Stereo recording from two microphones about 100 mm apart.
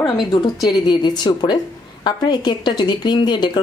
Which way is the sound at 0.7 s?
45° left (ahead or behind).